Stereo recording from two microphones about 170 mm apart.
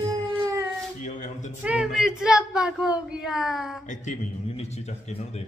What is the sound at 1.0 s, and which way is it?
Speech, 45° left (ahead or behind).